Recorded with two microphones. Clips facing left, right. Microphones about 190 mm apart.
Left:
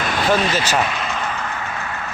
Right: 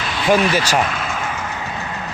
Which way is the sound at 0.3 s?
10° right (ahead or behind).